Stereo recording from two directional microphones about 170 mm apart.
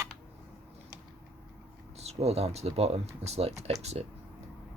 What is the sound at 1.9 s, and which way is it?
Speech, 40° right (ahead or behind).